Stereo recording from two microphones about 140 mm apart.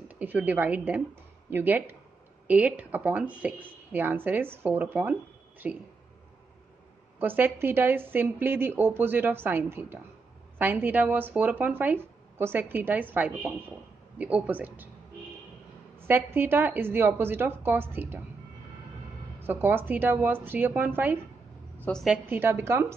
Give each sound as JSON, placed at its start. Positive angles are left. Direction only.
{"t": 0.1, "sound": "a woman's voice", "side_deg": -10}
{"t": 7.2, "sound": "speech", "side_deg": -15}
{"t": 16.1, "sound": "speech", "side_deg": -15}
{"t": 19.4, "sound": "speech", "side_deg": -15}